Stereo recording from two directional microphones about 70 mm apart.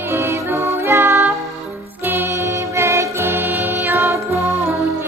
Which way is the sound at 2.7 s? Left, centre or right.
Right.